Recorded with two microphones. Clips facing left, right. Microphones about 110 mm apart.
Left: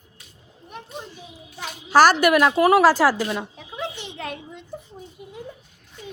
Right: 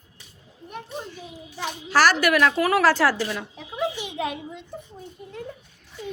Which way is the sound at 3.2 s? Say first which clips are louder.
Left 3 dB; 25° left (ahead or behind).